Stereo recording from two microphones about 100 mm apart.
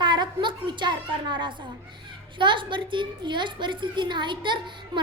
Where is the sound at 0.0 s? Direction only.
50° right (ahead or behind).